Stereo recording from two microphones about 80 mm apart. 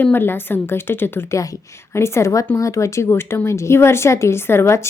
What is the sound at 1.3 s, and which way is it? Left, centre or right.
A woman's voice, left.